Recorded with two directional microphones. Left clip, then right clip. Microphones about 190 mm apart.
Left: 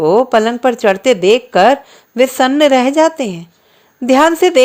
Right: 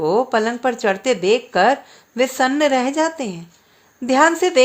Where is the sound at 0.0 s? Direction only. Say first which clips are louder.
Left 7 dB; 30° left (ahead or behind).